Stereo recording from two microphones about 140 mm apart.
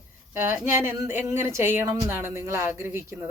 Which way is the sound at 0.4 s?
15° right (ahead or behind).